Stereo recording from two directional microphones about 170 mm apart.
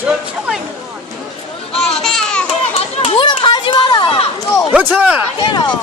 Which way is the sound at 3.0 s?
30° left (ahead or behind).